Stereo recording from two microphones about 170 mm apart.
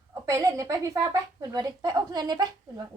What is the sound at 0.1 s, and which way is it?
A woman's voice, 20° right (ahead or behind).